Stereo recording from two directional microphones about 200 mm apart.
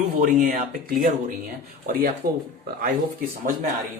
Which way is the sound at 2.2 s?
50° right (ahead or behind).